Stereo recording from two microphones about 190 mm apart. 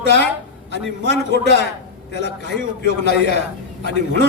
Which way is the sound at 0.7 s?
60° left (ahead or behind).